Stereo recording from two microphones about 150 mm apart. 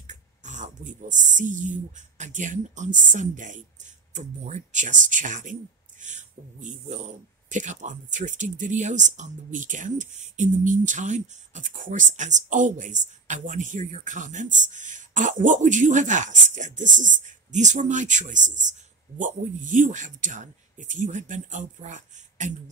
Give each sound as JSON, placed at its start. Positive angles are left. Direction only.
{"t": 0.0, "sound": "speech", "side_deg": -55}